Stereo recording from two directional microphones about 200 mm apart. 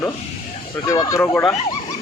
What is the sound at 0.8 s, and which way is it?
Speech, 15° left (ahead or behind).